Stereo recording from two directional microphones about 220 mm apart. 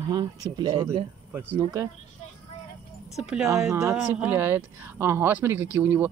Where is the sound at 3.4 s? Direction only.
15° right (ahead or behind).